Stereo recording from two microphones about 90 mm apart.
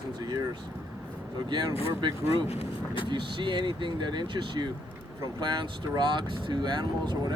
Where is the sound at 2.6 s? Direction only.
70° left (ahead or behind).